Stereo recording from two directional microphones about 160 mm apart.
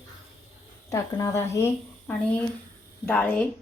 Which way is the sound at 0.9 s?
20° left (ahead or behind).